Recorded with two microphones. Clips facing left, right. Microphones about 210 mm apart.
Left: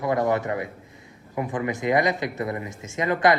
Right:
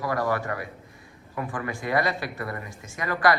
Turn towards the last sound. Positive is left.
turn(degrees=20)  # may be behind; listen again after turning